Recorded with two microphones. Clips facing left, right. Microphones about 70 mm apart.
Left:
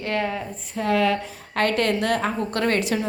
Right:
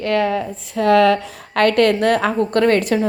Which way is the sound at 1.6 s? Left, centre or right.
Right.